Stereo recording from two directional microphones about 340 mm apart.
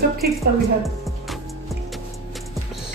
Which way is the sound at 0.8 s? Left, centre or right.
Centre.